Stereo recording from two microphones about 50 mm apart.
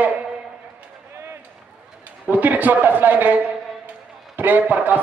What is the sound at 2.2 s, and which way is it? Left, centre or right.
A man's voice, right.